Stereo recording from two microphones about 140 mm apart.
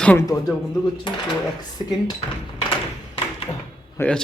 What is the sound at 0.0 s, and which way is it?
Speech, 10° left (ahead or behind).